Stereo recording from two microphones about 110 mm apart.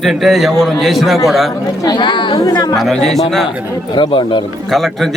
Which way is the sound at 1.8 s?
40° left (ahead or behind).